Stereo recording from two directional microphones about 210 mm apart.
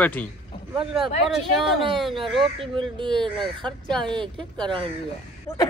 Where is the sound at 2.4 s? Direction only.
25° right (ahead or behind).